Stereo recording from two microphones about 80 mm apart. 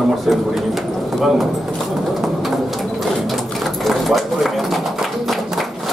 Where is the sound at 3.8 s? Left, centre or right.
Centre.